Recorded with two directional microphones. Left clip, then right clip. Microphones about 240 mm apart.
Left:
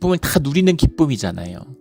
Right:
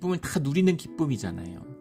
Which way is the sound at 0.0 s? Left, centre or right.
Left.